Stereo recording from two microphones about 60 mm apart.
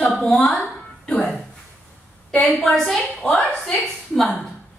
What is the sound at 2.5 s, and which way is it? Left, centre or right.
A woman's voice, centre.